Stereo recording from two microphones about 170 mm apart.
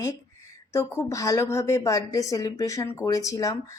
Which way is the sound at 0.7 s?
20° left (ahead or behind).